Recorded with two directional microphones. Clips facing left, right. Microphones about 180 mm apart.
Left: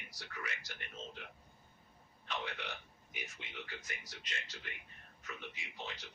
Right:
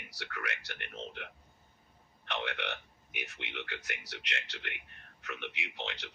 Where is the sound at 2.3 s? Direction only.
70° right (ahead or behind).